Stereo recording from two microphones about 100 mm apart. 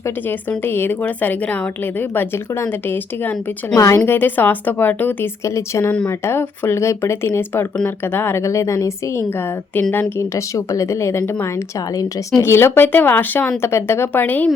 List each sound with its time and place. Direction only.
0.3 s a woman's voice: 20° left (ahead or behind)
5.5 s speech: 30° left (ahead or behind)